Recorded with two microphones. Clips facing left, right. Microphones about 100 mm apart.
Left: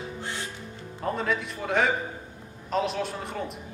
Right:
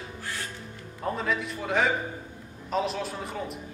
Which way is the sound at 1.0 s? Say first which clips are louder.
Left 1 dB; centre (ahead or behind).